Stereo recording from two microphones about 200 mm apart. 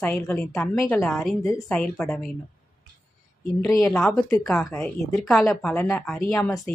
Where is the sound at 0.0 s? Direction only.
5° left (ahead or behind).